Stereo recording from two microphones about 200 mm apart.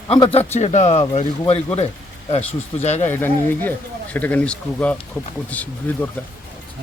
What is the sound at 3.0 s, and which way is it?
Speech, 10° left (ahead or behind).